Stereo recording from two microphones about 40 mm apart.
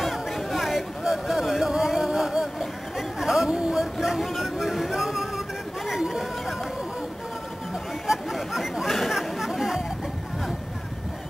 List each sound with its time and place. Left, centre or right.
0.0 s a sound: centre
3.2 s chatter: centre
3.4 s a sound: right
3.7 s music: centre
5.9 s chatter: centre
8.1 s chatter: centre